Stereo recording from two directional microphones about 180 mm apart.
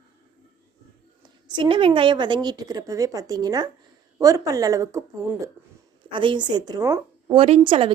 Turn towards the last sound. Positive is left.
turn(degrees=-30)  # may be behind; listen again after turning